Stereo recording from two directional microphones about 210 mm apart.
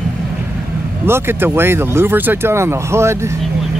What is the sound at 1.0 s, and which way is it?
Speech, 10° right (ahead or behind).